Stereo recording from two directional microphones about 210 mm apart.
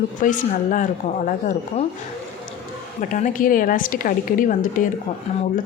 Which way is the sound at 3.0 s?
40° left (ahead or behind).